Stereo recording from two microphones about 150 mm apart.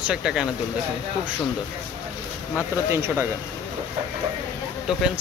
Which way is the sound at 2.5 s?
10° right (ahead or behind).